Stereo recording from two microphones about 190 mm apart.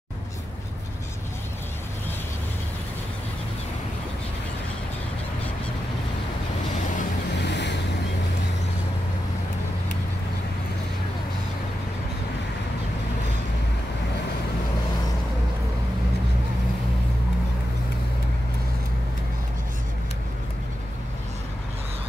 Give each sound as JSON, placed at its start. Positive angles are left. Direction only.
{"t": 7.4, "sound": "waves", "side_deg": 65}